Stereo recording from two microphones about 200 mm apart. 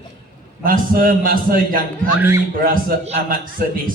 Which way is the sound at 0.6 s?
45° right (ahead or behind).